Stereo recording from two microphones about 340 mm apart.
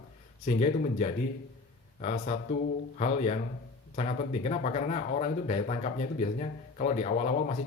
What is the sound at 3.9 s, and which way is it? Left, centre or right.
Speech, centre.